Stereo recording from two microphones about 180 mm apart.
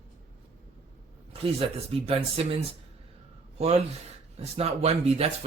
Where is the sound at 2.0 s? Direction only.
30° right (ahead or behind).